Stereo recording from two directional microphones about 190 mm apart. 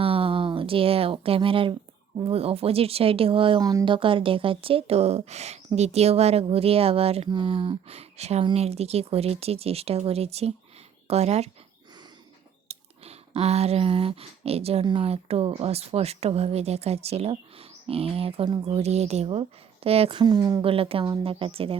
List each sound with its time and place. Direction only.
0.0 s a sound: 30° right (ahead or behind)
2.1 s speech: 30° right (ahead or behind)
12.6 s speech: 35° right (ahead or behind)